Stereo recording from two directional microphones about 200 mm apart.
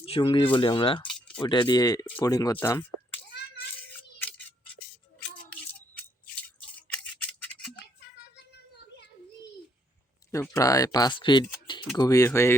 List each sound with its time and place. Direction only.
0.0 s speech: 25° left (ahead or behind)
4.2 s scissors: 10° left (ahead or behind)
6.9 s a sound: 5° left (ahead or behind)
10.4 s speech: 15° left (ahead or behind)